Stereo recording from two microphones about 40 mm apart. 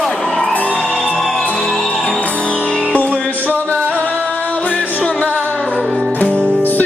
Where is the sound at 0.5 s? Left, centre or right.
Left.